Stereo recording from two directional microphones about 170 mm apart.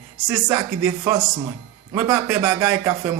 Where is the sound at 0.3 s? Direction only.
20° right (ahead or behind).